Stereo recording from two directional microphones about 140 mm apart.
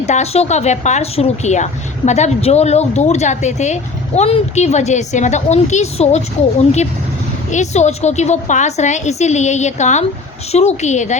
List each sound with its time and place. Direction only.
0.0 s a woman's voice: 50° left (ahead or behind)
7.5 s a woman's voice: 55° left (ahead or behind)